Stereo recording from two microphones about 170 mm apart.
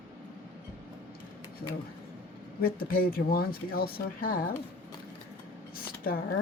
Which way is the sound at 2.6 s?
60° left (ahead or behind).